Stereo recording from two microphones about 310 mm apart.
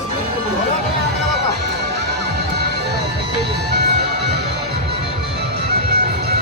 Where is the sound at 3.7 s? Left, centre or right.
Right.